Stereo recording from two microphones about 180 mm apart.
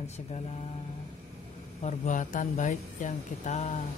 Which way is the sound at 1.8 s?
45° left (ahead or behind).